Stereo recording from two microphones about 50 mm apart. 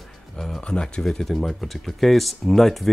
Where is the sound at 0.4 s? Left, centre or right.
Centre.